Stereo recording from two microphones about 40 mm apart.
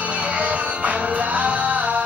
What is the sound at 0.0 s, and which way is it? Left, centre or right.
Music, right.